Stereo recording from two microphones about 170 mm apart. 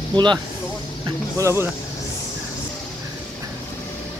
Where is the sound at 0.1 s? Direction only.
25° right (ahead or behind).